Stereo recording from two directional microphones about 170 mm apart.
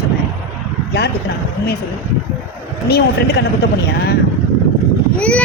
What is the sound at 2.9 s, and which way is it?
Speech, 65° left (ahead or behind).